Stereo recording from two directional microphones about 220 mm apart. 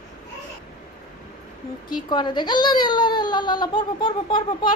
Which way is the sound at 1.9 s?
20° left (ahead or behind).